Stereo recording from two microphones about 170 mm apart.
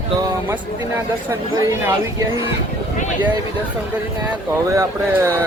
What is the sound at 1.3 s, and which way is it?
Speech, 15° right (ahead or behind).